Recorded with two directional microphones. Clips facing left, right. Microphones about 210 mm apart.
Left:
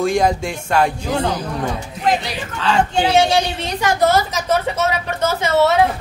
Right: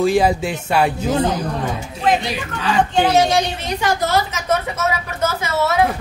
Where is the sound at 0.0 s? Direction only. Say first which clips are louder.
Right 1 dB; 5° right (ahead or behind).